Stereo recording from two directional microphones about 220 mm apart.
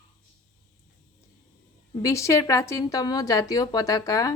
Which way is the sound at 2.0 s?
15° left (ahead or behind).